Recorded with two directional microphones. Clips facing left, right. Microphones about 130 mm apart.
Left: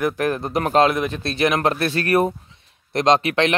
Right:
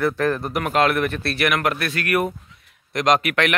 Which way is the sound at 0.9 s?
15° left (ahead or behind).